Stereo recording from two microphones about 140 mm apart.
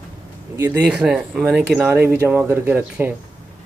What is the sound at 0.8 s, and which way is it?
Speech, 5° right (ahead or behind).